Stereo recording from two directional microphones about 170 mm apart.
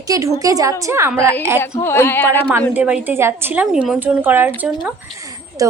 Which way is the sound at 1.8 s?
15° left (ahead or behind).